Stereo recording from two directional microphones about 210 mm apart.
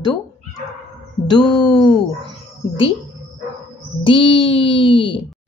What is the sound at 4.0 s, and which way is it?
Speech, 25° left (ahead or behind).